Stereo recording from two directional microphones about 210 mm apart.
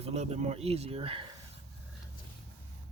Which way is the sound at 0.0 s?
30° right (ahead or behind).